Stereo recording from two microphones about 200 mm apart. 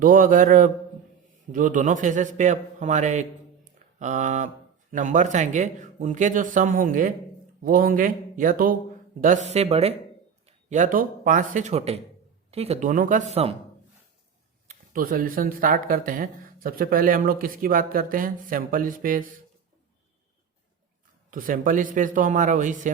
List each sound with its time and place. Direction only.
0.0 s a man's voice: 45° right (ahead or behind)
9.5 s a man's voice: 30° right (ahead or behind)
14.7 s speech: 45° right (ahead or behind)
21.2 s a man's voice: 45° right (ahead or behind)